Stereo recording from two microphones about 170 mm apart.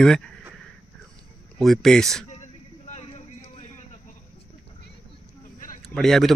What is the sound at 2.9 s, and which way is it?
Vehicle, 40° left (ahead or behind).